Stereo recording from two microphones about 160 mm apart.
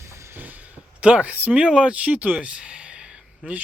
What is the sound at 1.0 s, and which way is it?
Speech, 10° right (ahead or behind).